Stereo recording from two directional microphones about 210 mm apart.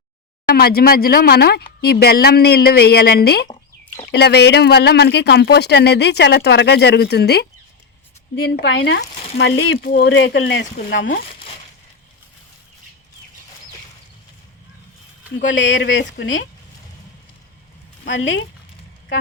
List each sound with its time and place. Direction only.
0.5 s speech: 45° left (ahead or behind)
3.8 s chicken: 10° left (ahead or behind)
4.1 s speech: 50° left (ahead or behind)
15.4 s speech: 60° left (ahead or behind)
18.0 s speech: 65° left (ahead or behind)